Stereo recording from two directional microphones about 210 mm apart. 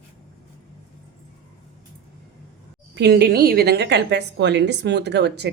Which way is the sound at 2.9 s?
50° right (ahead or behind).